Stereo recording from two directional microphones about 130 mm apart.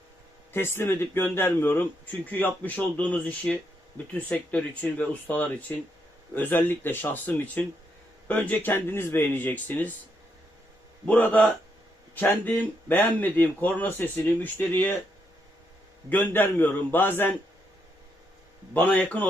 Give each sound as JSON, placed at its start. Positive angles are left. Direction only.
{"t": 0.5, "sound": "speech", "side_deg": 20}
{"t": 11.0, "sound": "speech", "side_deg": 10}
{"t": 16.0, "sound": "speech", "side_deg": 15}
{"t": 18.7, "sound": "speech", "side_deg": 10}